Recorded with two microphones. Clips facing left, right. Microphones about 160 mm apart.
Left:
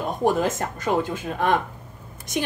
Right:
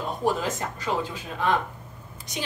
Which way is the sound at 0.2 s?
50° left (ahead or behind).